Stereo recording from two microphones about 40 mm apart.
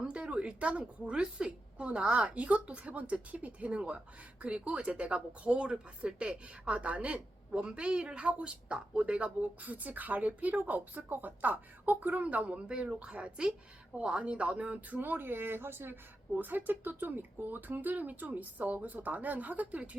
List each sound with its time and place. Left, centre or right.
0.0 s a woman's voice: right
16.3 s speech: right